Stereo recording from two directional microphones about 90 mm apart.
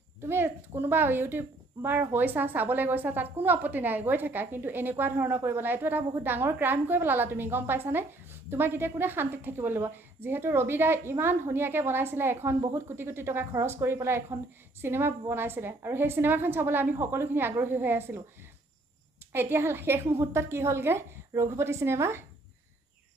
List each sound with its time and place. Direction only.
0.2 s a woman's voice: 25° right (ahead or behind)
19.3 s a woman's voice: 25° right (ahead or behind)